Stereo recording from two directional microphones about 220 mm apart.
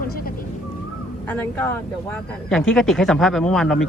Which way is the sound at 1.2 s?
10° left (ahead or behind).